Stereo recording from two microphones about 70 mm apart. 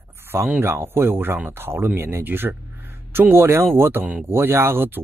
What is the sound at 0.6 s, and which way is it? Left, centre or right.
Speech, right.